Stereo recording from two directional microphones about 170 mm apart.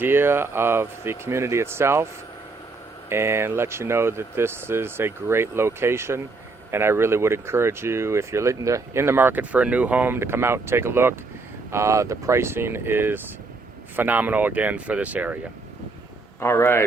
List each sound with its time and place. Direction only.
0.0 s speech: 15° right (ahead or behind)
3.1 s speech: 15° right (ahead or behind)
16.4 s speech: 15° left (ahead or behind)